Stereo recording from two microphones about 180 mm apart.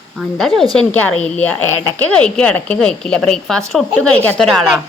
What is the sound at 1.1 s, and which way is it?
Speech, 35° left (ahead or behind).